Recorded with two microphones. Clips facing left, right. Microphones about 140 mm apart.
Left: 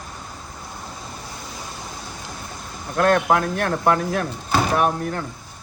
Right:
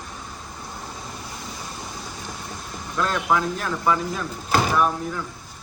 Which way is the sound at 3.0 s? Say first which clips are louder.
Left 5 dB; 60° left (ahead or behind).